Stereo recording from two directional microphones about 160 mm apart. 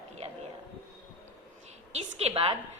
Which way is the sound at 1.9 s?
40° right (ahead or behind).